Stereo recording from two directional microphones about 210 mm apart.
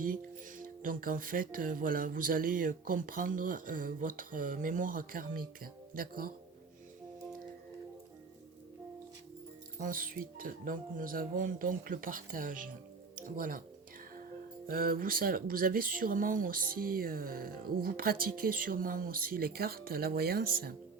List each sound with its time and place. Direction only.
0.0 s speech: 40° right (ahead or behind)
9.8 s speech: 40° right (ahead or behind)
14.7 s speech: 45° right (ahead or behind)